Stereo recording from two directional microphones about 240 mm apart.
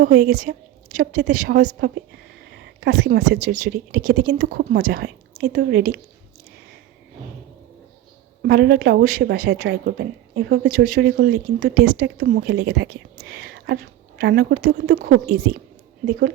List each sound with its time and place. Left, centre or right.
0.0 s speech: right
8.4 s speech: right